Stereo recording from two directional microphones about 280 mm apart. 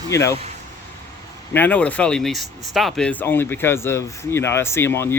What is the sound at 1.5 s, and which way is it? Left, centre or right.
Speech, centre.